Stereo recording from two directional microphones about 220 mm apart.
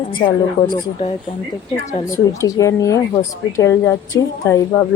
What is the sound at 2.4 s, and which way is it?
A woman's voice, 15° left (ahead or behind).